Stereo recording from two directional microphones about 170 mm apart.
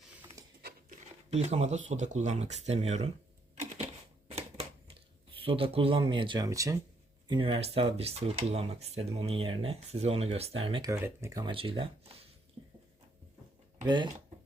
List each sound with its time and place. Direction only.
0.4 s patter: 20° right (ahead or behind)
1.3 s speech: 40° right (ahead or behind)
3.5 s typewriter: 40° right (ahead or behind)
4.3 s a sound: 35° right (ahead or behind)
5.4 s speech: 35° right (ahead or behind)
7.3 s speech: 30° right (ahead or behind)
10.9 s speech: 15° right (ahead or behind)
11.4 s speech: 30° right (ahead or behind)
12.6 s a sound: 25° right (ahead or behind)
13.8 s speech: 25° right (ahead or behind)